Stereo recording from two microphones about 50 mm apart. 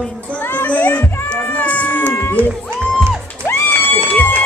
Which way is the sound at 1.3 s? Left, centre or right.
Left.